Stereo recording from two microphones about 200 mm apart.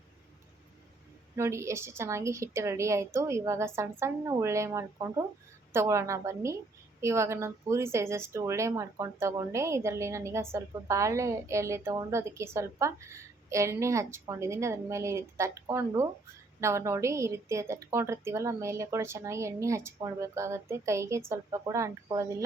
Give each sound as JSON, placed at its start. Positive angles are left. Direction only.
{"t": 1.4, "sound": "speech", "side_deg": -15}